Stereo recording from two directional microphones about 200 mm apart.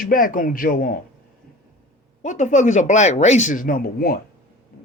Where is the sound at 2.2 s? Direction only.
40° left (ahead or behind).